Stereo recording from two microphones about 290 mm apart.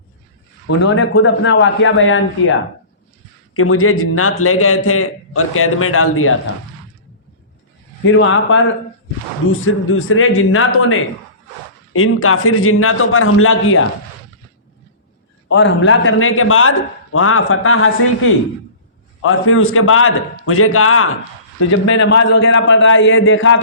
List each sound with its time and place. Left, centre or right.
0.8 s a man's voice: left
8.0 s a man's voice: left
15.4 s a man's voice: left
19.2 s a man's voice: left